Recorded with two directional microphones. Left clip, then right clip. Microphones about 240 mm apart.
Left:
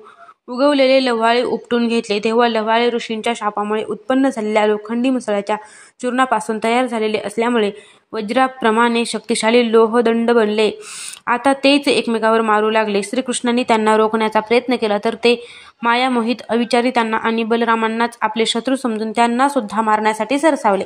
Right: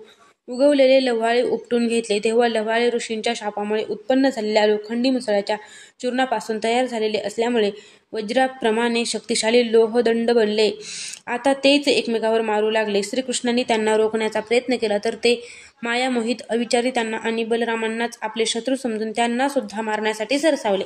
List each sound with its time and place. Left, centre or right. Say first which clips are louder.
0.6 s a woman's voice: left 2 dB; centre